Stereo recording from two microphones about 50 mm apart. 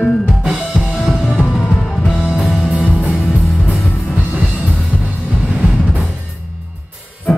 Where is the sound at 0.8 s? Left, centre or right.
Centre.